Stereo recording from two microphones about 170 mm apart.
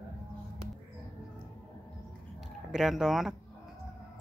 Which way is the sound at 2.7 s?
Centre (ahead or behind).